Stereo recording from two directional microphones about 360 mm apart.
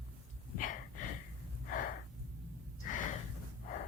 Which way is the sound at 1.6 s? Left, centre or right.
Left.